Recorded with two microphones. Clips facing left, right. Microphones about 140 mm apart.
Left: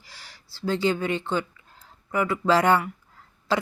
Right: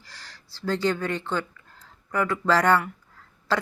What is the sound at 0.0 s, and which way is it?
A woman's voice, 10° left (ahead or behind).